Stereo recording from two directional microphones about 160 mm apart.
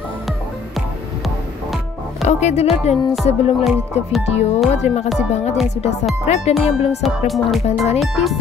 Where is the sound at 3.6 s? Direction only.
Centre (ahead or behind).